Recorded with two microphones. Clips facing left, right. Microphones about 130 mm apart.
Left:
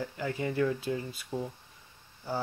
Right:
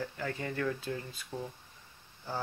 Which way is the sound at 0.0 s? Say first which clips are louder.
Left 4 dB; 15° left (ahead or behind).